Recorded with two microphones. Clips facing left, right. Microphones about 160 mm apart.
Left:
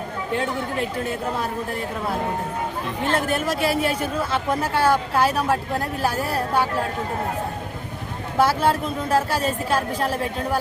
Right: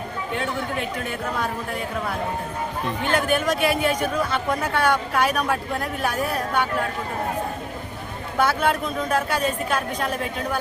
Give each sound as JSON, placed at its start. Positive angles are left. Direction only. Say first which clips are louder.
{"t": 3.0, "sound": "speech", "louder": "even", "side_deg": 30}
{"t": 8.4, "sound": "speech", "louder": "left 2 dB", "side_deg": 30}